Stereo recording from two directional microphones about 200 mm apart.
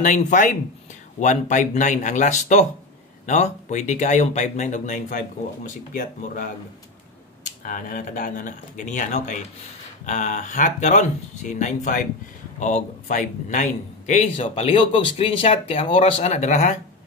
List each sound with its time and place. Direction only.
0.0 s a man's voice: 35° left (ahead or behind)
7.6 s a man's voice: 45° left (ahead or behind)